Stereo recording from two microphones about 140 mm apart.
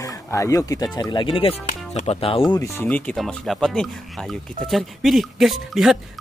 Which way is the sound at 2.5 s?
20° left (ahead or behind).